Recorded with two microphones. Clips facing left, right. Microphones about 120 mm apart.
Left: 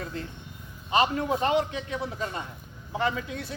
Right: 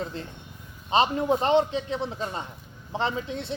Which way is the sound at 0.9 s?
25° right (ahead or behind).